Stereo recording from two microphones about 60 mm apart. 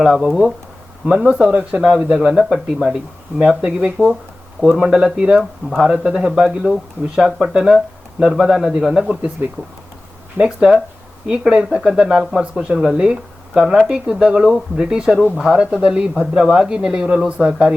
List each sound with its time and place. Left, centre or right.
0.0 s speech: centre
4.0 s speech: left
4.8 s speech: centre
10.3 s speech: centre